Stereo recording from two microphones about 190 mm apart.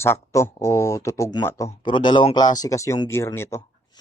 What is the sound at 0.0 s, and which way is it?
Speech, 15° left (ahead or behind).